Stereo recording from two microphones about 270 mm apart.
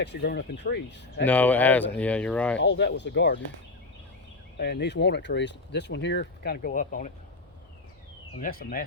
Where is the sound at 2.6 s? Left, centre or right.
Left.